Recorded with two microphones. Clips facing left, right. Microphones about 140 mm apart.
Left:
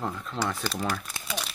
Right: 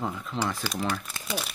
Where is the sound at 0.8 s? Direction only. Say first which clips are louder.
Right 2 dB; 5° left (ahead or behind).